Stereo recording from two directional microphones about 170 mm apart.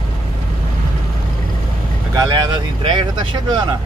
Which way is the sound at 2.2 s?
25° right (ahead or behind).